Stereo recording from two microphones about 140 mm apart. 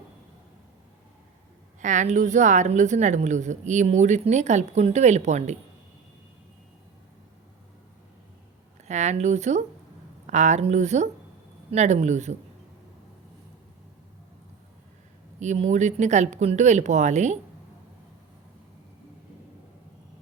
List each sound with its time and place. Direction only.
1.8 s a woman's voice: 60° right (ahead or behind)
8.9 s a woman's voice: 55° right (ahead or behind)
15.4 s a woman's voice: 55° right (ahead or behind)